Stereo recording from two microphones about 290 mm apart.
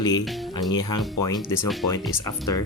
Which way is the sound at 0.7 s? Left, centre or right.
Centre.